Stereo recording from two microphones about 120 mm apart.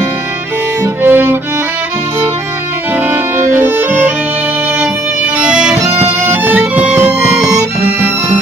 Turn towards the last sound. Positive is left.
turn(degrees=-10)  # may be behind; listen again after turning